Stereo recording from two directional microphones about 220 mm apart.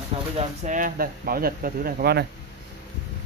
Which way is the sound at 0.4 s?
35° right (ahead or behind).